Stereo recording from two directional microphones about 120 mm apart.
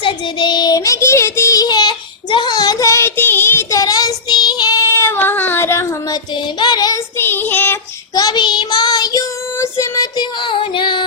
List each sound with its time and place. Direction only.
0.0 s child singing: 40° left (ahead or behind); by 6.1 s 20° left (ahead or behind)
6.6 s child singing: 35° left (ahead or behind)
7.2 s child singing: 15° left (ahead or behind)
8.1 s child singing: 35° left (ahead or behind)